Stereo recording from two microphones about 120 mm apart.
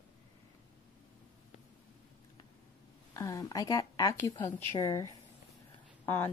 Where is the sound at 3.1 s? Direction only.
25° left (ahead or behind).